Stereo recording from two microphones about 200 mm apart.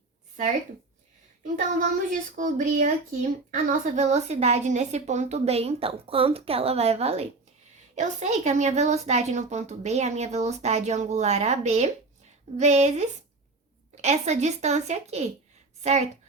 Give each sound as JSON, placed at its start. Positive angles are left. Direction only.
{"t": 1.8, "sound": "a woman's voice", "side_deg": -40}